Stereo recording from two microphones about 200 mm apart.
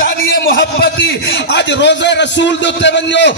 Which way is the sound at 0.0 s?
50° left (ahead or behind).